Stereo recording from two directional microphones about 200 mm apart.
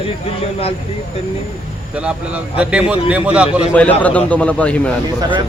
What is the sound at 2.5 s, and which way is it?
Speech, 5° right (ahead or behind).